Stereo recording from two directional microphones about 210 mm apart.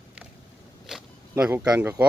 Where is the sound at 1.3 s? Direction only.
10° right (ahead or behind).